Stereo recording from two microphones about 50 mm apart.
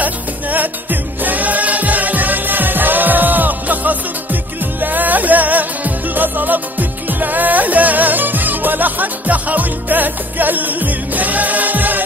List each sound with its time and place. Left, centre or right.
0.0 s music: right